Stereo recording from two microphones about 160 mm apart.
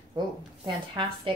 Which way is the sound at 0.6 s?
30° right (ahead or behind).